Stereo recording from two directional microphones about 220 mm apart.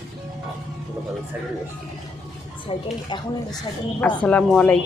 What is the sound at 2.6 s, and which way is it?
Speech, 20° left (ahead or behind).